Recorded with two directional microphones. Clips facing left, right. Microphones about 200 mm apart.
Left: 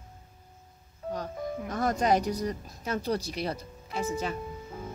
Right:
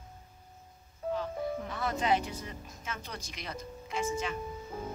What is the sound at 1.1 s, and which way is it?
Speech, 45° left (ahead or behind).